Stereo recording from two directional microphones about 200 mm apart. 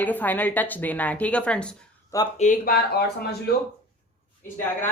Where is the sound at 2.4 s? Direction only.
40° left (ahead or behind).